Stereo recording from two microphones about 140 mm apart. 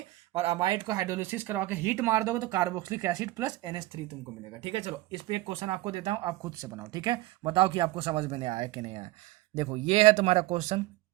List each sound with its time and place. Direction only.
0.5 s speech: 35° right (ahead or behind)
6.4 s speech: 20° right (ahead or behind); by 10.8 s 50° right (ahead or behind)